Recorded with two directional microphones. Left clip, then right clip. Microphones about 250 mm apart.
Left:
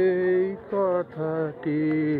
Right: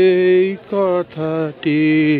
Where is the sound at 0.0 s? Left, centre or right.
Right.